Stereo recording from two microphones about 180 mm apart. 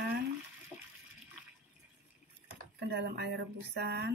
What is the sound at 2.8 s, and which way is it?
Speech, 65° right (ahead or behind).